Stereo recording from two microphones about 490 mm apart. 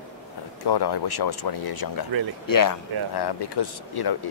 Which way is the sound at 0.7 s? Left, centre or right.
Left.